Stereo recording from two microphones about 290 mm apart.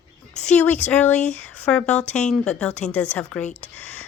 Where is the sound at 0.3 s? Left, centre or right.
Centre.